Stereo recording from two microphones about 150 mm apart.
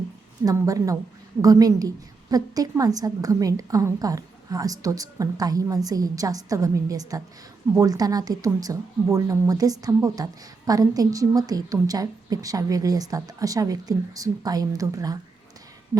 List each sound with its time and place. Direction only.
0.4 s a woman's voice: 25° right (ahead or behind)